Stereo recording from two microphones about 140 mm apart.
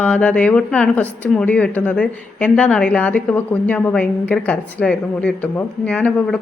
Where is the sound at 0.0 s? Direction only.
10° left (ahead or behind).